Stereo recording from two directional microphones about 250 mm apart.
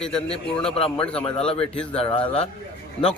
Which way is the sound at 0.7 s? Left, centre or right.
Left.